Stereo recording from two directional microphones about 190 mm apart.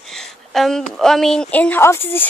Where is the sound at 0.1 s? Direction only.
Centre (ahead or behind).